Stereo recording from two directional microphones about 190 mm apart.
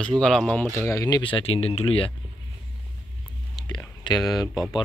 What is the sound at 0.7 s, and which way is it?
Speech, 15° left (ahead or behind).